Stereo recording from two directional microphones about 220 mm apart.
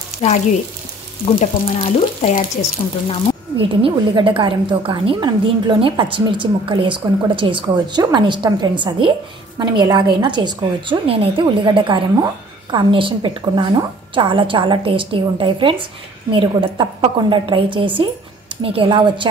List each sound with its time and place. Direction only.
1.4 s speech: 35° left (ahead or behind)
3.6 s a woman's voice: 25° right (ahead or behind)